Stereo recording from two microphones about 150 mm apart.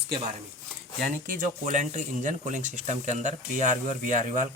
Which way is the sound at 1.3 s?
65° right (ahead or behind).